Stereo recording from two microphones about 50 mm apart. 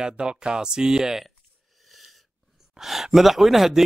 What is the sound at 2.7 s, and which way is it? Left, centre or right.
Speech, centre.